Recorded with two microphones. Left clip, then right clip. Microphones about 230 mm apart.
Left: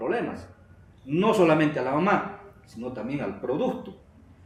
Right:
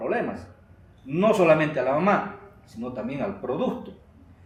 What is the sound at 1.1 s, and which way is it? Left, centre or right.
A man's voice, left.